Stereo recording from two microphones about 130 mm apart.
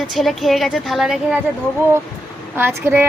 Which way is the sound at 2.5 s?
15° right (ahead or behind).